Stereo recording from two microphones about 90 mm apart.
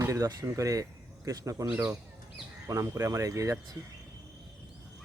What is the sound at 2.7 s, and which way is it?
Speech, 30° right (ahead or behind).